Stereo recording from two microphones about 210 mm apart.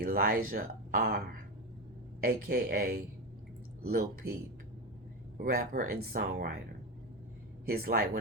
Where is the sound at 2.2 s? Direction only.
45° right (ahead or behind).